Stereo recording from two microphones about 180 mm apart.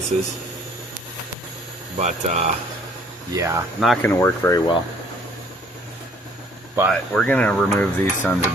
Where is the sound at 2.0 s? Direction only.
40° right (ahead or behind).